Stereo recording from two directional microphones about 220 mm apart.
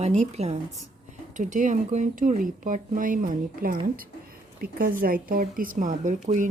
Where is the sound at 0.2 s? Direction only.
30° right (ahead or behind).